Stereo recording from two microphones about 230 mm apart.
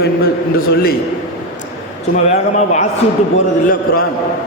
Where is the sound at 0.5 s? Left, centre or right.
Left.